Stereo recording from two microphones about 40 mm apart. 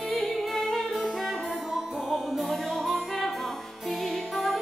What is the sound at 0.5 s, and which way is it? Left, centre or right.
Music, centre.